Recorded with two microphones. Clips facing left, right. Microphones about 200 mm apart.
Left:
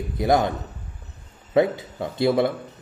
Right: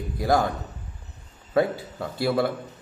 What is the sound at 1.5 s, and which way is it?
Speech, 20° left (ahead or behind).